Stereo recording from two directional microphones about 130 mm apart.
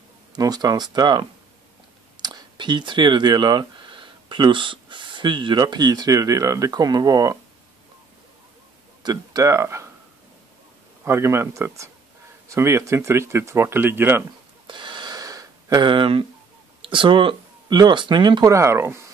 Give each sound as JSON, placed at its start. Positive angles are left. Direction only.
{"t": 0.4, "sound": "speech", "side_deg": -30}
{"t": 9.0, "sound": "speech", "side_deg": -30}
{"t": 11.1, "sound": "speech", "side_deg": -20}
{"t": 14.7, "sound": "gasp", "side_deg": -35}
{"t": 15.9, "sound": "speech", "side_deg": -40}
{"t": 18.5, "sound": "speech", "side_deg": -20}